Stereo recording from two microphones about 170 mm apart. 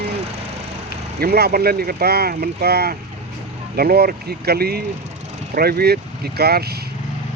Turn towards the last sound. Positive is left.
turn(degrees=-65)  # may be behind; listen again after turning